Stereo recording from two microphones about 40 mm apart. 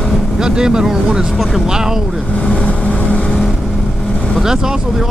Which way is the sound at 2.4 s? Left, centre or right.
Left.